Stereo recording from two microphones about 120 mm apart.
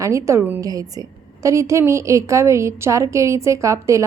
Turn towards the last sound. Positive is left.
turn(degrees=-25)  # may be behind; listen again after turning